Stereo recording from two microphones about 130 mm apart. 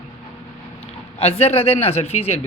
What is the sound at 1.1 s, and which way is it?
Speech, 45° left (ahead or behind).